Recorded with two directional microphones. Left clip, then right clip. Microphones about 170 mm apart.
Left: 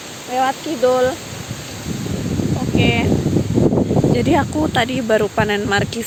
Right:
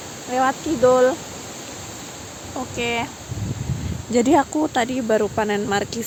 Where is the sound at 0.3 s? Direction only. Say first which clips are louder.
Left 2 dB; 20° right (ahead or behind).